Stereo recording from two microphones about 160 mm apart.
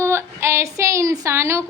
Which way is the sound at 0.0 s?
15° right (ahead or behind).